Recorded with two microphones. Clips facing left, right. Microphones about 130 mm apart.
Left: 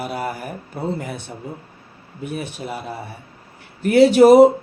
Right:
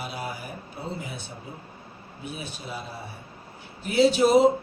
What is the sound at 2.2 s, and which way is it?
Speech, 65° left (ahead or behind).